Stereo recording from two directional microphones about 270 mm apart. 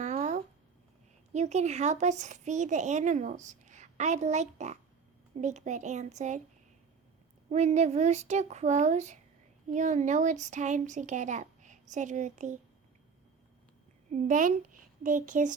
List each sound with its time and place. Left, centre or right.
0.0 s a sound: right
1.3 s speech: right
7.5 s speech: right
14.1 s speech: right